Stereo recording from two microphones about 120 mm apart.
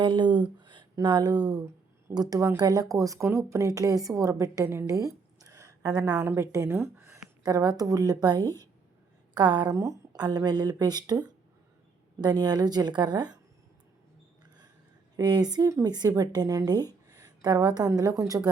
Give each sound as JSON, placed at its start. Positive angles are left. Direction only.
{"t": 0.0, "sound": "a woman's voice", "side_deg": -40}
{"t": 7.4, "sound": "a woman's voice", "side_deg": -35}
{"t": 15.1, "sound": "a woman's voice", "side_deg": -35}